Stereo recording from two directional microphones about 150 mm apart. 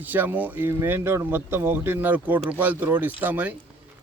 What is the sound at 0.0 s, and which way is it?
Speech, 10° right (ahead or behind).